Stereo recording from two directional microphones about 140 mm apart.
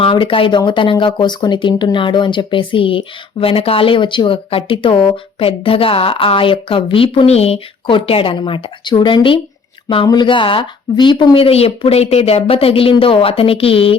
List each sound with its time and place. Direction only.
0.0 s a woman's voice: 40° left (ahead or behind)